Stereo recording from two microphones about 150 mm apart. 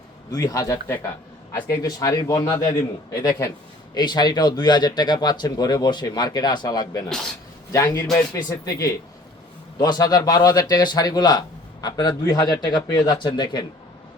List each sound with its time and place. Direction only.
0.3 s a man's voice: 25° left (ahead or behind)